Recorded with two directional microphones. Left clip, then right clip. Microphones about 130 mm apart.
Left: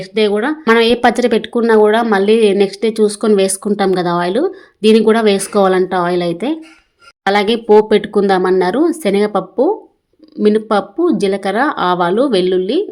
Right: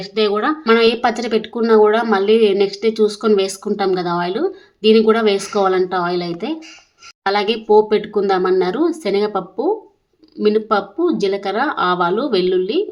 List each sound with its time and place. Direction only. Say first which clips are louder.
0.0 s speech: left 2 dB; 25° left (ahead or behind)
0.7 s a woman's voice: left 4 dB; 45° left (ahead or behind)